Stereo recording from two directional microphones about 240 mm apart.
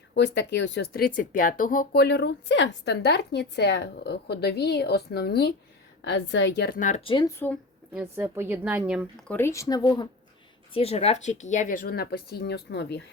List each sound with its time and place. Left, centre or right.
0.1 s speech: left; by 7.5 s centre
7.9 s a woman's voice: centre
9.3 s speech: centre; by 13.0 s left